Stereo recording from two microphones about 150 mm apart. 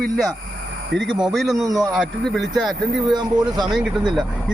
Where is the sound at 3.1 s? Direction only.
25° right (ahead or behind).